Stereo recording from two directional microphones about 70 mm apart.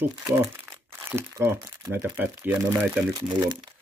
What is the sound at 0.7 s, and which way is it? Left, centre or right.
Crumpling, centre.